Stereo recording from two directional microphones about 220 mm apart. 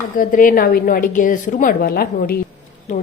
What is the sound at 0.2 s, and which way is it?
Speech, 40° left (ahead or behind).